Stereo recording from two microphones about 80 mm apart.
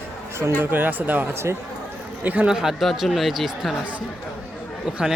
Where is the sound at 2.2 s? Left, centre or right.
Centre.